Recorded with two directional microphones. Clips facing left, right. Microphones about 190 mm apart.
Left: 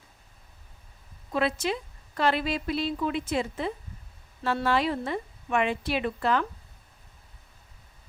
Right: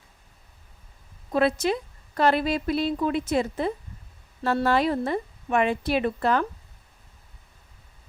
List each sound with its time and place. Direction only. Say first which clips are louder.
1.3 s a woman's voice: right 5 dB; 40° right (ahead or behind)